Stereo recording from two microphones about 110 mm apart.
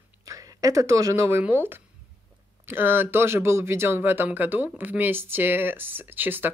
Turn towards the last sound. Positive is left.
turn(degrees=-15)  # may be behind; listen again after turning